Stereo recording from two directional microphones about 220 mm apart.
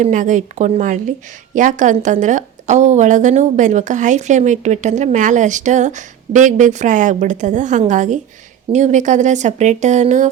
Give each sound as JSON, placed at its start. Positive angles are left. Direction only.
{"t": 0.0, "sound": "a woman's voice", "side_deg": -35}